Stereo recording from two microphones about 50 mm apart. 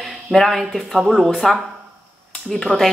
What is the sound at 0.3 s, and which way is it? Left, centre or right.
Speech, centre.